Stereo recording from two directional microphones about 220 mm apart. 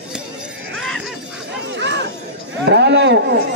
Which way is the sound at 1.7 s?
55° right (ahead or behind).